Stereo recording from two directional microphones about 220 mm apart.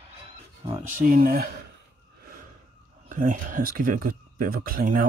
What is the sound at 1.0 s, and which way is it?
Speech, 40° right (ahead or behind).